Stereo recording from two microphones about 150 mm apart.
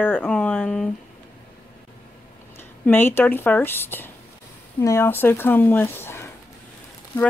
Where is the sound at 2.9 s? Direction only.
15° left (ahead or behind).